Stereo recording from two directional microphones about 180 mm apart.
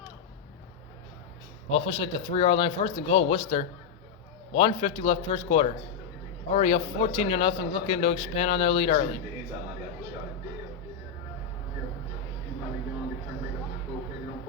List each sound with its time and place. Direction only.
1.7 s speech: 30° left (ahead or behind)